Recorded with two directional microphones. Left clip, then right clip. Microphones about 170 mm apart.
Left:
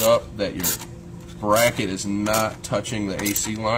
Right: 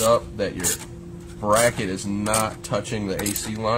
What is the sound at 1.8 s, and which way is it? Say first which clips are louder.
Speech: left 2 dB; 30° right (ahead or behind).